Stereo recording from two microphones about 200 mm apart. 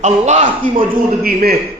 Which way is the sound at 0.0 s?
35° right (ahead or behind).